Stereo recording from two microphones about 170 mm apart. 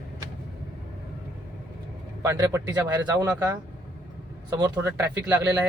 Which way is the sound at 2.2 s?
15° right (ahead or behind).